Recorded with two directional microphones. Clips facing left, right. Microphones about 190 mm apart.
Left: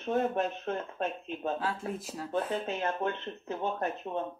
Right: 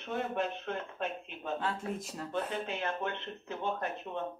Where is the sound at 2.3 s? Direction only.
40° left (ahead or behind).